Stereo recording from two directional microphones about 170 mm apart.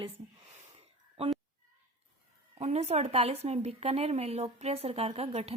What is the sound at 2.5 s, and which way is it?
A woman's voice, 40° right (ahead or behind).